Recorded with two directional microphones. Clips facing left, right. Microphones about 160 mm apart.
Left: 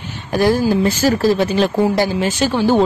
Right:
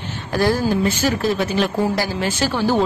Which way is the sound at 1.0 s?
40° left (ahead or behind).